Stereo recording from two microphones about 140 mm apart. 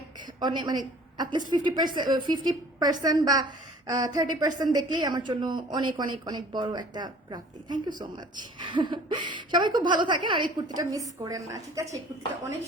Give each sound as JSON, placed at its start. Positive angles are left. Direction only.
{"t": 0.3, "sound": "a woman's voice", "side_deg": -30}